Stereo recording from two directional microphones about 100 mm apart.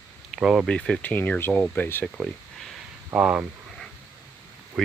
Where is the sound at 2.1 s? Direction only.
Centre (ahead or behind).